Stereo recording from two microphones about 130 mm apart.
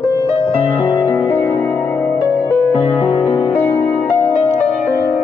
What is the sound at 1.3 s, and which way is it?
Music, 15° left (ahead or behind).